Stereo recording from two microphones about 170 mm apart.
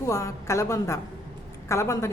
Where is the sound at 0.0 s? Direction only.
20° left (ahead or behind).